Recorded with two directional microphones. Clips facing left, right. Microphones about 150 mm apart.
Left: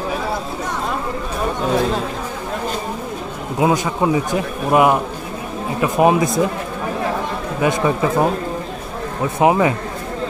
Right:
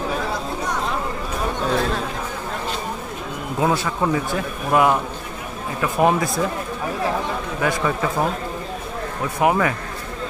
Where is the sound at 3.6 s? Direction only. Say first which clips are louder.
Left 4 dB; 15° left (ahead or behind).